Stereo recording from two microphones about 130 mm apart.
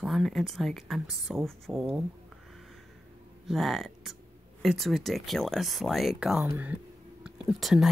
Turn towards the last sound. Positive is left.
turn(degrees=0)  # may be behind; listen again after turning